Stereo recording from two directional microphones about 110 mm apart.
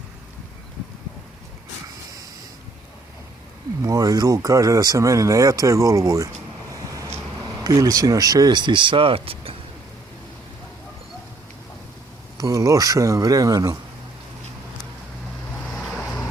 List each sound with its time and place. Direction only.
3.8 s speech: 35° right (ahead or behind)
6.9 s a sound: 30° right (ahead or behind)
7.6 s speech: 35° right (ahead or behind); by 9.6 s 55° right (ahead or behind)
12.4 s speech: 30° right (ahead or behind)